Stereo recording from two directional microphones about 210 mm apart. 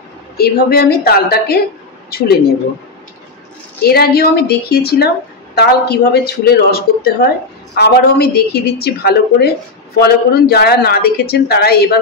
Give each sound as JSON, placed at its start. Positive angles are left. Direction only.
{"t": 0.4, "sound": "a woman's voice", "side_deg": 45}
{"t": 3.8, "sound": "a woman's voice", "side_deg": 50}